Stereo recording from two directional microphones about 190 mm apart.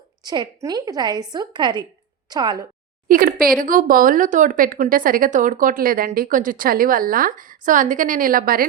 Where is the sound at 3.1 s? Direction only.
50° right (ahead or behind).